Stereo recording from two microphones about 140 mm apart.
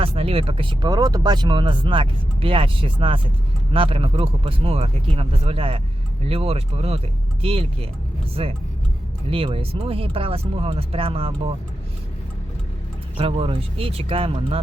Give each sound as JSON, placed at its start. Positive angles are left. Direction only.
{"t": 0.0, "sound": "speech", "side_deg": -40}
{"t": 13.1, "sound": "speech", "side_deg": -45}